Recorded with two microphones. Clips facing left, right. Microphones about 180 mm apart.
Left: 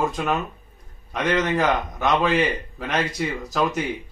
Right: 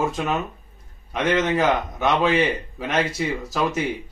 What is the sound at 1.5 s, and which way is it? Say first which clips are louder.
A man's voice: right 1 dB; 5° right (ahead or behind).